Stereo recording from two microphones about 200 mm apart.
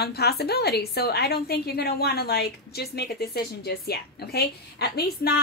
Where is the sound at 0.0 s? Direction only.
55° left (ahead or behind).